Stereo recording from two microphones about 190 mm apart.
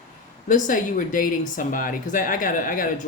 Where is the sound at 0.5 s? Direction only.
45° left (ahead or behind).